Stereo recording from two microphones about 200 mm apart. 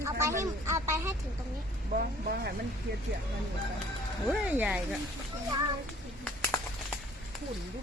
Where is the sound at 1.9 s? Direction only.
50° right (ahead or behind).